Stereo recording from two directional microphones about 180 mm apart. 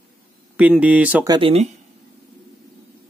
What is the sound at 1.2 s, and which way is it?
Speech, 20° right (ahead or behind).